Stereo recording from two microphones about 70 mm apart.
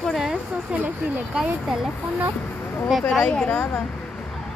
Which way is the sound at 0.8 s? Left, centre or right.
Right.